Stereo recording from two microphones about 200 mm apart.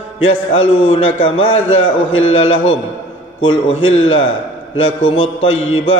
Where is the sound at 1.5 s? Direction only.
85° left.